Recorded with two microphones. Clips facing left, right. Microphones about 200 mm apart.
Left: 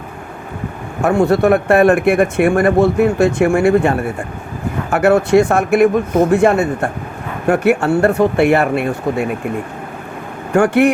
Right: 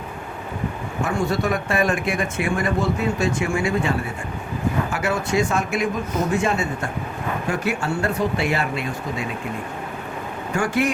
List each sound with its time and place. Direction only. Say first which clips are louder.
1.0 s speech: left 11 dB; 60° left (ahead or behind)
10.5 s speech: left 10 dB; 60° left (ahead or behind)